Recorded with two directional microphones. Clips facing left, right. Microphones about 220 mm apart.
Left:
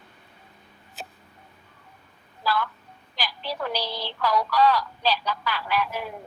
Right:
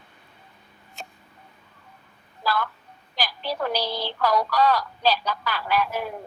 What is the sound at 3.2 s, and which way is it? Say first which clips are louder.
A woman's voice: right 3 dB; 45° right (ahead or behind).